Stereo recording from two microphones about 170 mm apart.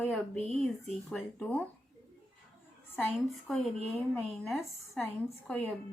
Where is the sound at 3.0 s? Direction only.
5° left (ahead or behind).